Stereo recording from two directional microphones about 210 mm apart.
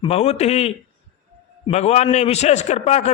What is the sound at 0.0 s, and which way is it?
Speech, 30° left (ahead or behind).